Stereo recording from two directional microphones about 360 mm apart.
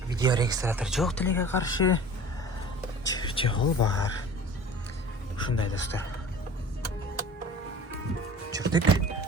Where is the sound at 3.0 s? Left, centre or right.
Centre.